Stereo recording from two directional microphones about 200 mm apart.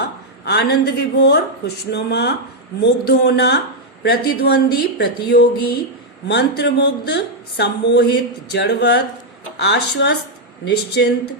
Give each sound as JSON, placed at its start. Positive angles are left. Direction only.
{"t": 0.4, "sound": "speech", "side_deg": 55}